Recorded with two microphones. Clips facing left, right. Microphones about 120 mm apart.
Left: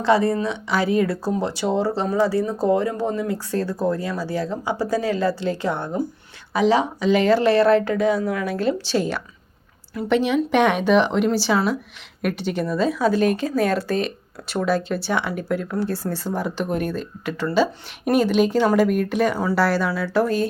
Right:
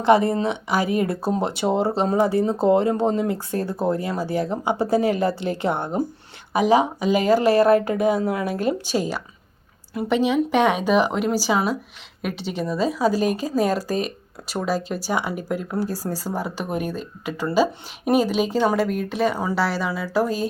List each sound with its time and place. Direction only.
0.0 s speech: 20° right (ahead or behind)
8.2 s speech: 30° right (ahead or behind)
8.4 s speech: 15° right (ahead or behind)
14.5 s speech: 5° right (ahead or behind)